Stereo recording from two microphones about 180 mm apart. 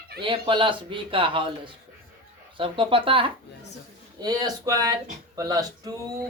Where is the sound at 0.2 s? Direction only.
30° right (ahead or behind).